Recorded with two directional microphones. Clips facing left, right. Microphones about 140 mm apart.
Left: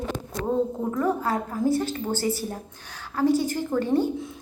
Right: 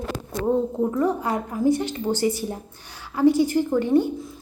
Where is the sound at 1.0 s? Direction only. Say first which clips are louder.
Left 1 dB; 15° right (ahead or behind).